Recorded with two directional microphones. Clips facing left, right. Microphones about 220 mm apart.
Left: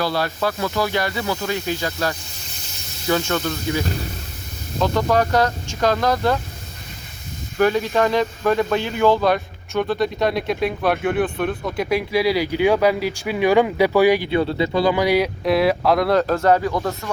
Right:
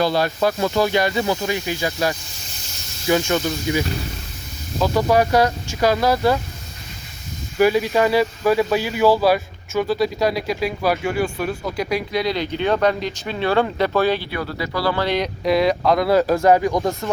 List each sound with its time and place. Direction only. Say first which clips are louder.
0.0 s speech: right 3 dB; 20° right (ahead or behind)
7.6 s speech: right 1 dB; 10° right (ahead or behind)